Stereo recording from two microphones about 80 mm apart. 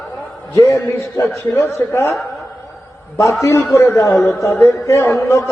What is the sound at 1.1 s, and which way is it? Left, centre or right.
A man's voice, left.